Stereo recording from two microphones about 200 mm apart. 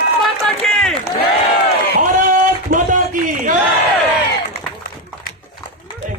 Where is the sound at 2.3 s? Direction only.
40° right (ahead or behind).